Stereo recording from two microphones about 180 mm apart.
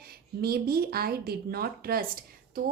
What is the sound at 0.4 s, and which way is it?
A woman's voice, 60° right (ahead or behind).